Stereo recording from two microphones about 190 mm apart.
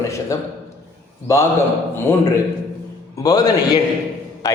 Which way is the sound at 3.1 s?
20° left (ahead or behind).